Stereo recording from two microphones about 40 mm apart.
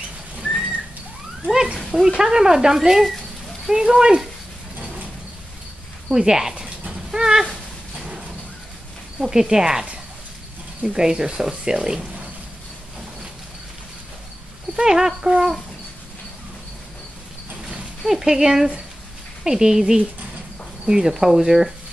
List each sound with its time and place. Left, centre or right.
1.5 s a sound: centre
1.9 s speech: centre
6.0 s speech: centre
7.1 s a sound: centre
9.2 s speech: centre
14.8 s speech: centre
18.2 s speech: centre